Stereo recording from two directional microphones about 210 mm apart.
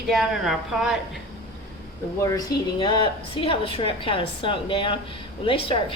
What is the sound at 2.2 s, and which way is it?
A woman's voice, 20° left (ahead or behind).